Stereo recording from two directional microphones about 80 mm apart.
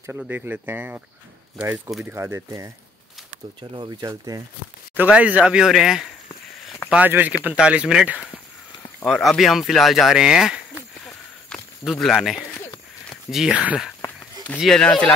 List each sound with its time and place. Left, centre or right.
0.3 s speech: right
2.1 s speech: right
3.7 s speech: right
4.9 s speech: centre
6.9 s speech: right
9.0 s speech: centre
11.1 s a sound: centre
11.8 s speech: centre
13.1 s a sound: centre
13.5 s speech: centre
14.6 s speech: centre
14.9 s speech: centre